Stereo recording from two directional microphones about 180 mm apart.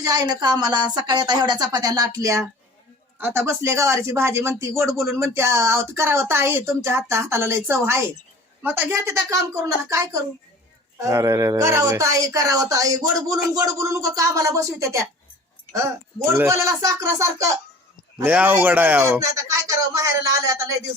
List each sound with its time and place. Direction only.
0.0 s speech: 20° right (ahead or behind)